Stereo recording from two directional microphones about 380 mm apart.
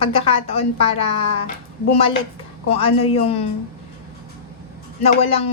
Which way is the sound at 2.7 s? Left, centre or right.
Centre.